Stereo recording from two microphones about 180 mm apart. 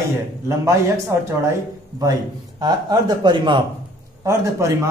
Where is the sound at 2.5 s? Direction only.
20° right (ahead or behind).